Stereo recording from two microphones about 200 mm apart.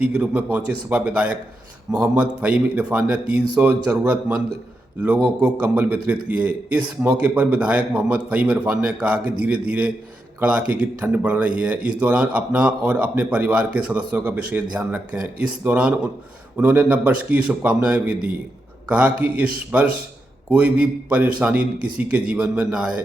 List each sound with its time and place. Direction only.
0.0 s a man's voice: 5° right (ahead or behind)